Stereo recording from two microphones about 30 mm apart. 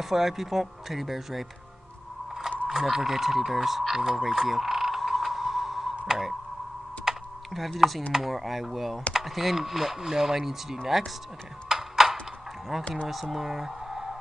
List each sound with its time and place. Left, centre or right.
0.0 s speech: centre
2.7 s speech: centre
4.2 s a sound: centre
7.1 s typing: centre
7.5 s speech: centre
11.7 s a sound: centre
12.7 s speech: centre